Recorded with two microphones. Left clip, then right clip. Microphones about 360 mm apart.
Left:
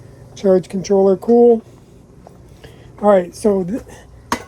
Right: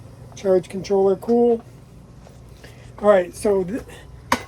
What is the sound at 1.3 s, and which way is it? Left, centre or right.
Speech, left.